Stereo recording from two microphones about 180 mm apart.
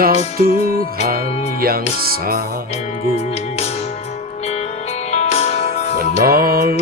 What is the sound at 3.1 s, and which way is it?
Music, 35° left (ahead or behind).